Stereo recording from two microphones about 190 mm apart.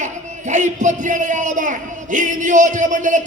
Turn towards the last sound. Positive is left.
turn(degrees=-40)  # may be behind; listen again after turning